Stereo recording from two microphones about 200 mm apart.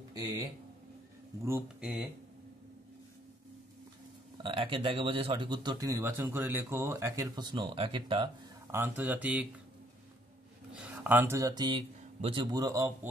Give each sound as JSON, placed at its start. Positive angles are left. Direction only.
{"t": 1.4, "sound": "speech", "side_deg": -10}
{"t": 4.4, "sound": "speech", "side_deg": -25}
{"t": 8.7, "sound": "speech", "side_deg": -10}
{"t": 10.7, "sound": "speech", "side_deg": -5}